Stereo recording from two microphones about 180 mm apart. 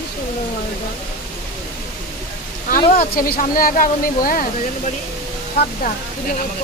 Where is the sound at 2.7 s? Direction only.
55° left (ahead or behind).